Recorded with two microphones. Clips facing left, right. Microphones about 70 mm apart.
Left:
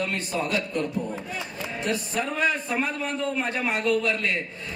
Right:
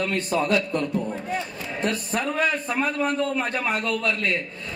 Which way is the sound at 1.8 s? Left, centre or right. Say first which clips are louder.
Right 2 dB; right.